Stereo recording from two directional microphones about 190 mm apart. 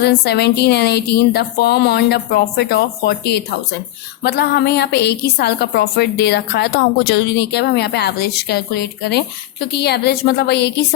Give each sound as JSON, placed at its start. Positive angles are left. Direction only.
{"t": 0.0, "sound": "a woman's voice", "side_deg": 55}